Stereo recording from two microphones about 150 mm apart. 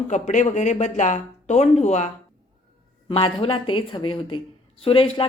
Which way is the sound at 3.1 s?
40° left (ahead or behind).